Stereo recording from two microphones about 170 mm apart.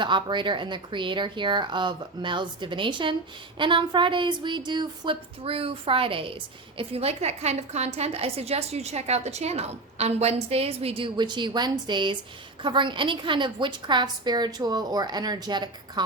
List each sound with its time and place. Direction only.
0.0 s a woman's voice: 25° right (ahead or behind)